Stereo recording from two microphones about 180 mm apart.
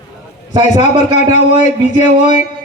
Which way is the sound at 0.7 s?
40° left (ahead or behind).